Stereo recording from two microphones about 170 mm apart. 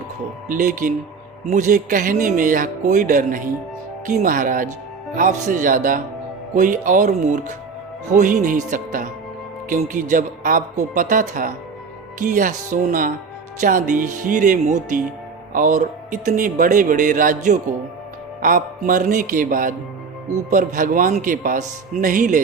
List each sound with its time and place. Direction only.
0.4 s speech: 50° right (ahead or behind)